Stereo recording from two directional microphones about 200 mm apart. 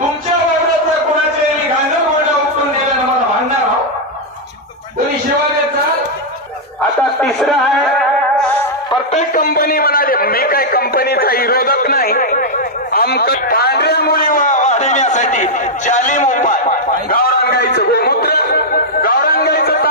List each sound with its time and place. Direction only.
7.2 s a man's voice: centre (ahead or behind)
9.1 s a man's voice: 45° left (ahead or behind)
15.9 s a sound: 40° left (ahead or behind)